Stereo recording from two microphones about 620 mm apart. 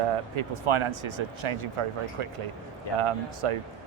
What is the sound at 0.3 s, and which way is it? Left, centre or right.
Speech, right.